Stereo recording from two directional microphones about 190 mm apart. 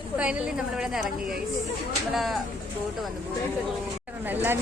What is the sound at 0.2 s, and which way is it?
A woman's voice, 5° right (ahead or behind).